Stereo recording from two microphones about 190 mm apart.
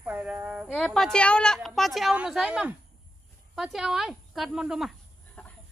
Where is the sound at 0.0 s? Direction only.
5° right (ahead or behind).